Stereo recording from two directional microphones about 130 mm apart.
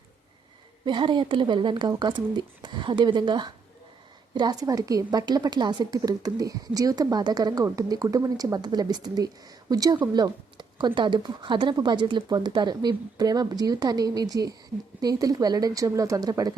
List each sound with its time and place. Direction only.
0.9 s a woman's voice: 35° right (ahead or behind)